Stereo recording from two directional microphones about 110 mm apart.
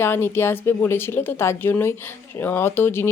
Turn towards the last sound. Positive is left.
turn(degrees=20)  # may be behind; listen again after turning